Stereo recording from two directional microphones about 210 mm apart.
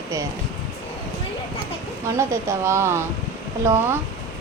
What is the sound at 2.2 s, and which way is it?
Speech, 15° right (ahead or behind).